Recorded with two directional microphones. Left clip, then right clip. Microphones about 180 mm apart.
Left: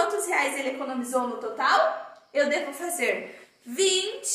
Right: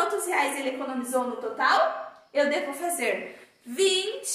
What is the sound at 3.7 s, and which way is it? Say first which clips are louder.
Speech: even; 10° left (ahead or behind).